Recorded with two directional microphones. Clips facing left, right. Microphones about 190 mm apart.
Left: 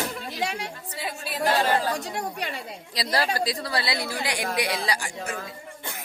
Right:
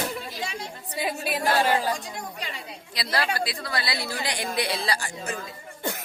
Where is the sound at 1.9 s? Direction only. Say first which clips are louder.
Left 5 dB; 65° left (ahead or behind).